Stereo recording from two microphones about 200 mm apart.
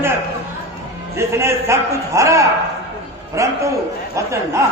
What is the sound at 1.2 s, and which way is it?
A man's voice, 15° right (ahead or behind).